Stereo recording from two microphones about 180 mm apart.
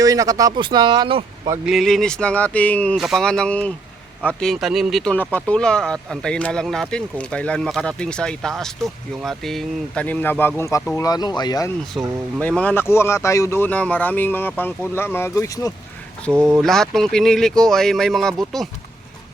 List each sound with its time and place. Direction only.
0.0 s speech: 20° right (ahead or behind)
1.6 s speech: centre (ahead or behind); by 11.7 s 20° left (ahead or behind)
11.9 s speech: 5° left (ahead or behind)
16.3 s speech: 15° right (ahead or behind)
16.6 s speech: centre (ahead or behind)